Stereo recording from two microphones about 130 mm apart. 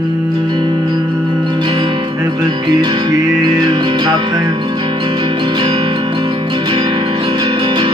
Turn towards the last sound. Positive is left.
turn(degrees=-40)  # may be behind; listen again after turning